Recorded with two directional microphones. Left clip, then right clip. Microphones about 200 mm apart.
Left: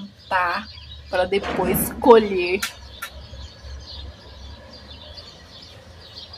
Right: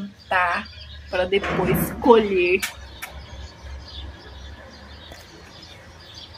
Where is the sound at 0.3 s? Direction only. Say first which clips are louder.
Right 1 dB; 10° left (ahead or behind).